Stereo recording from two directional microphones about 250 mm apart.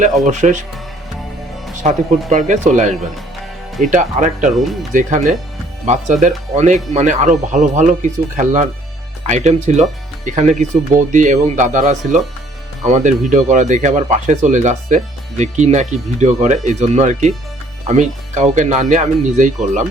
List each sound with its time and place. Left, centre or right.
0.3 s speech: right
1.8 s speech: right